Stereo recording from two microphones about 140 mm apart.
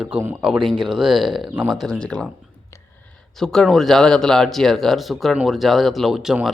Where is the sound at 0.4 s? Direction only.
Centre (ahead or behind).